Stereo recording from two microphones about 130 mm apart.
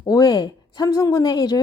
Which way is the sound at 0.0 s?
30° left (ahead or behind).